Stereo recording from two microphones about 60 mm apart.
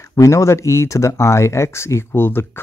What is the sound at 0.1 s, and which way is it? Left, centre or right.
Speech, left.